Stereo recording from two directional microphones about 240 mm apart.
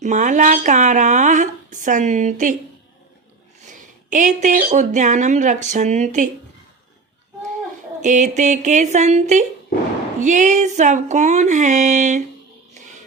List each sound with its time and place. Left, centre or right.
0.0 s speech: right
3.7 s speech: right
8.0 s speech: right